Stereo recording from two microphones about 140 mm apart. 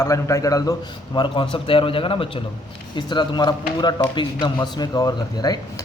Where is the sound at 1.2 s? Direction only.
40° left (ahead or behind).